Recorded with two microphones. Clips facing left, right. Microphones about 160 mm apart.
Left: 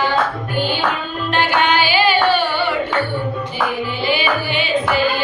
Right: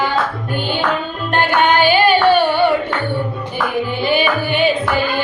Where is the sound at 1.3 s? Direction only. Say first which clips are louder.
Right 3 dB; 55° right (ahead or behind).